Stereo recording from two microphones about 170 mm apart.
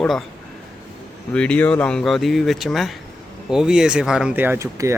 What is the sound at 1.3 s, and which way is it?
Speech, 5° left (ahead or behind).